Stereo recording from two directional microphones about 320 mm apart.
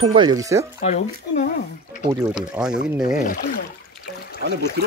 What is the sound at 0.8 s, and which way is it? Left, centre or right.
Speech, left.